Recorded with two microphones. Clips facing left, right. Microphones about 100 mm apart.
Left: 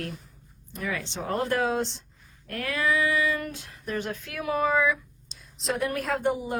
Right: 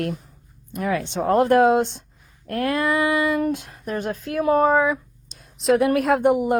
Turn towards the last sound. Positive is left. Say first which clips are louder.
# right 9 dB
turn(degrees=-55)  # may be behind; listen again after turning